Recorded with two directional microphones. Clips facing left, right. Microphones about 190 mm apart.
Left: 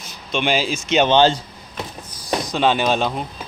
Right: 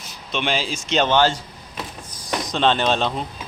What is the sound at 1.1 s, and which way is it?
Speech, 20° left (ahead or behind).